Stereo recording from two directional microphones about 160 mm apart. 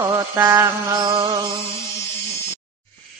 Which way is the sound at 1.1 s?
25° right (ahead or behind).